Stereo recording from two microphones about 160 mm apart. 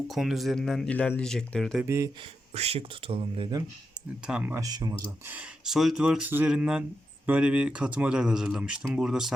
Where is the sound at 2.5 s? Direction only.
40° right (ahead or behind).